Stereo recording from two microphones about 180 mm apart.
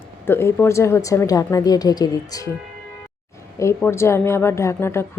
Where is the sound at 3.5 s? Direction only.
15° left (ahead or behind).